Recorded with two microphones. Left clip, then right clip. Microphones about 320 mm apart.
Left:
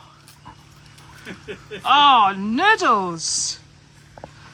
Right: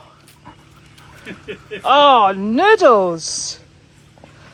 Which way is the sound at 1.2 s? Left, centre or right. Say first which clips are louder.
Right 3 dB; centre.